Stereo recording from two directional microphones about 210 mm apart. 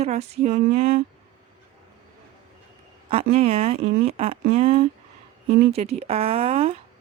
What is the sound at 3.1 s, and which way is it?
Speech, 30° right (ahead or behind).